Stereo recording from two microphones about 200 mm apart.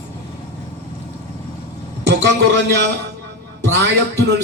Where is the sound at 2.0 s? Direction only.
60° right (ahead or behind).